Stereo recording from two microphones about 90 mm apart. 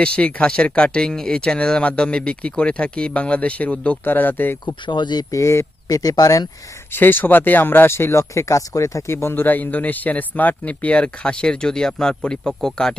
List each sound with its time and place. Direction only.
0.0 s speech: 15° left (ahead or behind)
4.6 s speech: 55° left (ahead or behind)
5.3 s speech: 30° left (ahead or behind)
6.9 s speech: 20° left (ahead or behind)